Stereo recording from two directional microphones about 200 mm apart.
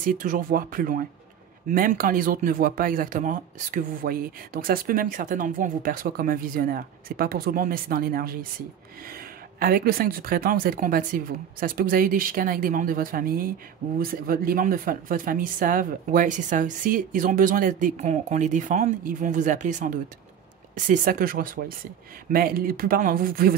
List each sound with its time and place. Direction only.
0.0 s speech: 40° right (ahead or behind)
9.6 s speech: 45° right (ahead or behind)